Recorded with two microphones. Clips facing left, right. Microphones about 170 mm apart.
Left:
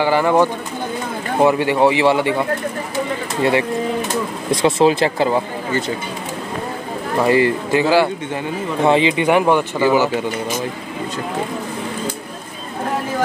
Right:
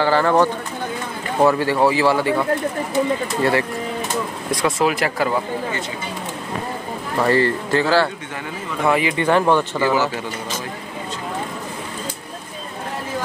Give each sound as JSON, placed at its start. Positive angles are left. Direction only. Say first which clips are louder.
{"t": 0.0, "sound": "speech", "louder": "left 1 dB", "side_deg": 15}
{"t": 4.5, "sound": "speech", "louder": "left 6 dB", "side_deg": 25}
{"t": 7.2, "sound": "speech", "louder": "left 3 dB", "side_deg": 15}